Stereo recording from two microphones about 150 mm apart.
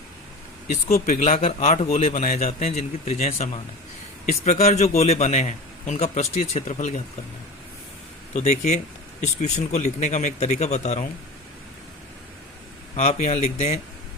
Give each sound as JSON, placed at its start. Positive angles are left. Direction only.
{"t": 0.7, "sound": "speech", "side_deg": 60}
{"t": 1.4, "sound": "a man's voice", "side_deg": 50}
{"t": 8.4, "sound": "a man's voice", "side_deg": 50}
{"t": 13.0, "sound": "a man's voice", "side_deg": 50}